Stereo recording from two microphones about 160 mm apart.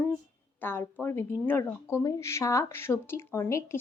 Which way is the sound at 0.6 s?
15° left (ahead or behind).